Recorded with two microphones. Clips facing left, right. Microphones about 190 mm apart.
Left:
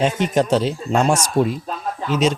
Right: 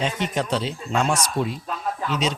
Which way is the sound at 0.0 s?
45° left (ahead or behind).